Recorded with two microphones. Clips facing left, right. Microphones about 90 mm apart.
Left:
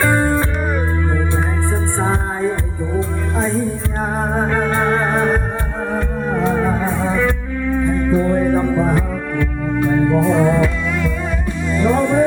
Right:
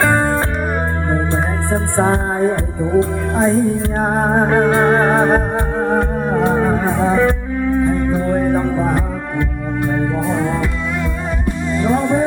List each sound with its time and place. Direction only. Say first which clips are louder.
0.0 s music: right 1 dB; 35° right (ahead or behind)
1.7 s music: right 6 dB; 60° right (ahead or behind)
7.0 s music: right 4 dB; 20° right (ahead or behind)
11.7 s music: left 1 dB; 20° right (ahead or behind)